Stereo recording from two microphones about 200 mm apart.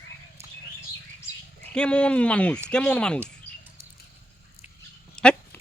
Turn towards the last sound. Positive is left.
turn(degrees=5)  # may be behind; listen again after turning